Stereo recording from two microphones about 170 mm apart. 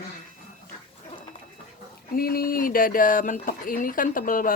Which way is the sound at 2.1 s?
60° left (ahead or behind).